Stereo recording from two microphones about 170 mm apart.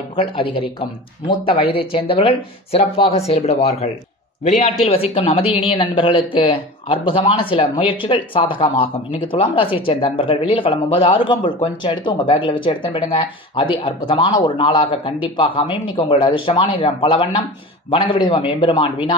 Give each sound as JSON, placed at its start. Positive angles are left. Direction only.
{"t": 0.1, "sound": "speech", "side_deg": 35}